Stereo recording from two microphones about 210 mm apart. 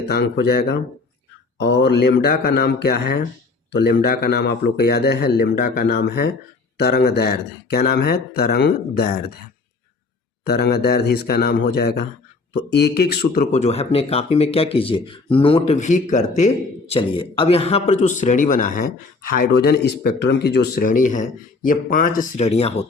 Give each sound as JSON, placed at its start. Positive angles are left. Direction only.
{"t": 0.1, "sound": "a man's voice", "side_deg": 50}
{"t": 10.4, "sound": "a man's voice", "side_deg": 50}
{"t": 13.5, "sound": "speech", "side_deg": 30}
{"t": 19.5, "sound": "speech", "side_deg": 50}